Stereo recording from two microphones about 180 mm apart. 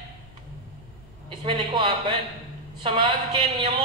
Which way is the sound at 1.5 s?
30° right (ahead or behind).